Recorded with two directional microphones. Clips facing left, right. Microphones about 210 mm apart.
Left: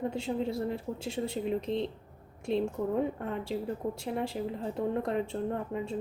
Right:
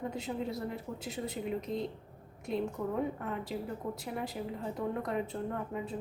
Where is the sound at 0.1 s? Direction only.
30° left (ahead or behind).